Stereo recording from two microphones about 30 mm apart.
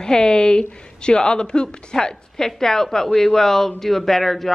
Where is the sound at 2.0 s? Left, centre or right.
Centre.